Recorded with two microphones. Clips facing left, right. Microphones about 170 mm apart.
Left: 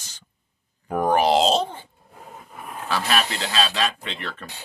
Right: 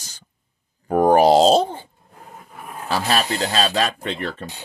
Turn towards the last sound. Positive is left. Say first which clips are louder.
# right 7 dB
turn(degrees=-45)  # may be behind; listen again after turning